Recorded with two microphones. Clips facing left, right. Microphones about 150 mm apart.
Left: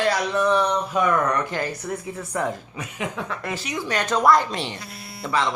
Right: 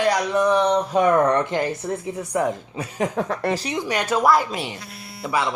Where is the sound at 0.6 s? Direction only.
35° right (ahead or behind); by 2.5 s 15° right (ahead or behind).